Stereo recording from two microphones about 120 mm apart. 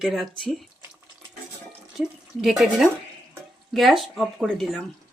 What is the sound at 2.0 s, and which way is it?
Speech, centre (ahead or behind).